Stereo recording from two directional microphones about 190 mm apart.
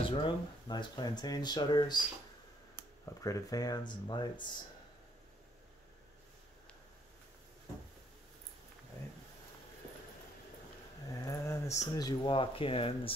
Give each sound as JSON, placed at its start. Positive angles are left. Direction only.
{"t": 0.0, "sound": "speech", "side_deg": 25}
{"t": 3.2, "sound": "speech", "side_deg": 20}
{"t": 11.1, "sound": "a sound", "side_deg": 15}
{"t": 11.9, "sound": "speech", "side_deg": 20}